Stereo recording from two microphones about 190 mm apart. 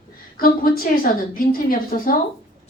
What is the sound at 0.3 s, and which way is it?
A woman's voice, 50° left (ahead or behind).